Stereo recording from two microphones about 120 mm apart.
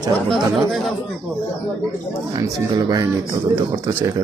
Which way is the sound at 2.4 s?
35° right (ahead or behind).